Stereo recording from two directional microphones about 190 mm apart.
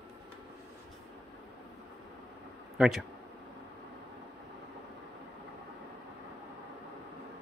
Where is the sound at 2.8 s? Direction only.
Centre (ahead or behind).